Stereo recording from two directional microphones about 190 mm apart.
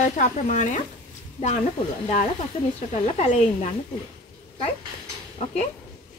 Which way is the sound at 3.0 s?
40° left (ahead or behind).